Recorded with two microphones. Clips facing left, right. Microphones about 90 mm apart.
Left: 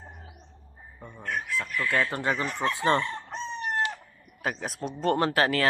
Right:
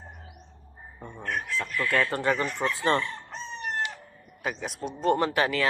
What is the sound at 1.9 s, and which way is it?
Speech, 20° left (ahead or behind).